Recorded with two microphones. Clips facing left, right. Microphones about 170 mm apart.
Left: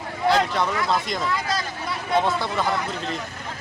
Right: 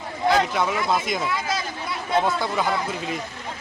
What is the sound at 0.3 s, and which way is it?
Speech, 5° right (ahead or behind).